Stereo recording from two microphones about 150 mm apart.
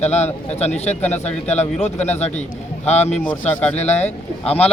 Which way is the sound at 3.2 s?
10° left (ahead or behind).